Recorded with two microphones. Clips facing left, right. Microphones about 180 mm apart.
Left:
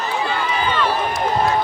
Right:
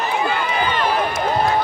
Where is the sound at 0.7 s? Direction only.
15° right (ahead or behind).